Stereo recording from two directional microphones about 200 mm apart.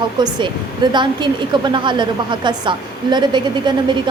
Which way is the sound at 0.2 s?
25° right (ahead or behind).